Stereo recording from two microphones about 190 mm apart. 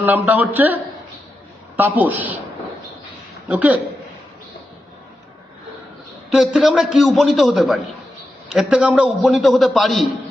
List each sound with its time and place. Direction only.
0.0 s a man's voice: 10° right (ahead or behind)
3.5 s a man's voice: 10° right (ahead or behind)
6.3 s a man's voice: centre (ahead or behind)